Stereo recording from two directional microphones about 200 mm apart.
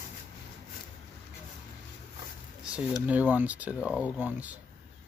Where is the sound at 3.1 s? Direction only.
10° right (ahead or behind).